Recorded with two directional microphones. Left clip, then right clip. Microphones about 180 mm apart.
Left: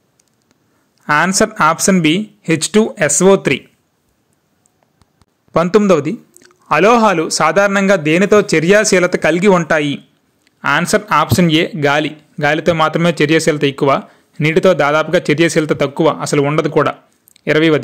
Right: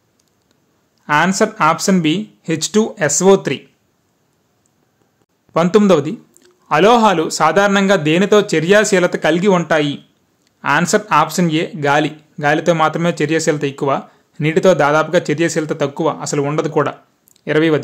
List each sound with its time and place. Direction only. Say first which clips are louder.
1.0 s speech: left 1 dB; 20° left (ahead or behind)
5.5 s speech: left 1 dB; 30° left (ahead or behind)